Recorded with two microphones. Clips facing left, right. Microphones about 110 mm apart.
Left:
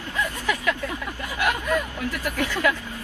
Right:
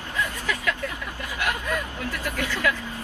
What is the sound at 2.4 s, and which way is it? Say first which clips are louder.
Speech: left 3 dB; 25° left (ahead or behind).